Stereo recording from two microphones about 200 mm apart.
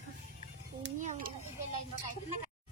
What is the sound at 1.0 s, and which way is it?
Speech, 40° right (ahead or behind).